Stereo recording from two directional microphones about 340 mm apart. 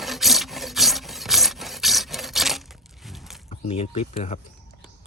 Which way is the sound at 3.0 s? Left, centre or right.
Centre.